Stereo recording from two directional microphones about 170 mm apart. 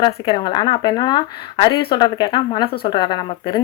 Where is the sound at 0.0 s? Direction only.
30° left (ahead or behind).